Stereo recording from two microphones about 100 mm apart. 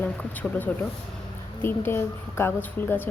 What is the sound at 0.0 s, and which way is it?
Speech, 15° left (ahead or behind).